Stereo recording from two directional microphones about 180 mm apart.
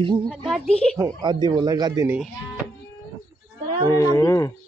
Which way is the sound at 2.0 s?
5° right (ahead or behind).